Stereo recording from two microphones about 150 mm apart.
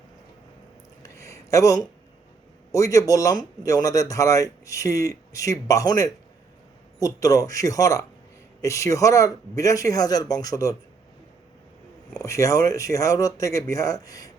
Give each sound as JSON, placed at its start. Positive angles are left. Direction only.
{"t": 1.0, "sound": "a sound", "side_deg": 20}
{"t": 2.7, "sound": "speech", "side_deg": 20}
{"t": 12.2, "sound": "speech", "side_deg": 20}